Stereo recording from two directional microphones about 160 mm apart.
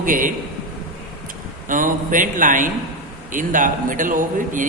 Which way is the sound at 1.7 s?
55° right (ahead or behind).